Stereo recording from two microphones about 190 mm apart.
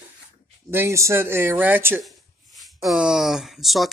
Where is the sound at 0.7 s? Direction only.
15° right (ahead or behind).